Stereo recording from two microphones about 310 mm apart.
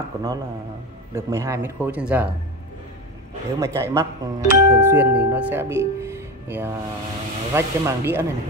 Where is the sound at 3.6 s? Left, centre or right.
Centre.